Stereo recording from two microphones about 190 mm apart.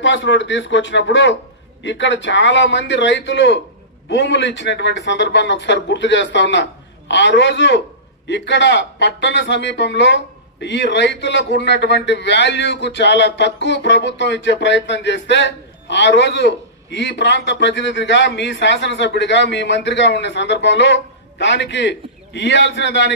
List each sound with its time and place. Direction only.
0.0 s a man's voice: 75° left (ahead or behind)